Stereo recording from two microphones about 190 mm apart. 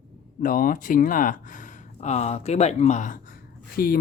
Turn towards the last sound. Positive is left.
turn(degrees=50)  # may be behind; listen again after turning